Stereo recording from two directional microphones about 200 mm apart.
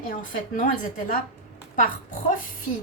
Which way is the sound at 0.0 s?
45° left (ahead or behind).